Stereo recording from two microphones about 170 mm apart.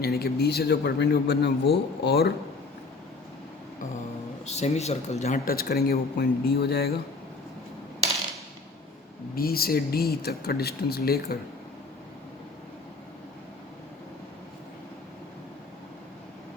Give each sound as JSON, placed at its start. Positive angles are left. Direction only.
{"t": 0.0, "sound": "a man's voice", "side_deg": 65}
{"t": 4.4, "sound": "speech", "side_deg": 40}
{"t": 5.5, "sound": "a man's voice", "side_deg": 65}
{"t": 9.3, "sound": "speech", "side_deg": 60}